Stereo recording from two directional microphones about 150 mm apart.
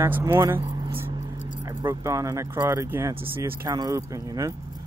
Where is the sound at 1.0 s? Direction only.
45° right (ahead or behind).